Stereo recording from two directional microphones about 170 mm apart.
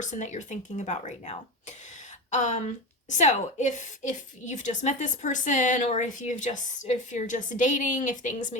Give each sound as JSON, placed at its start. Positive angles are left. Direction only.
{"t": 0.0, "sound": "a woman's voice", "side_deg": 45}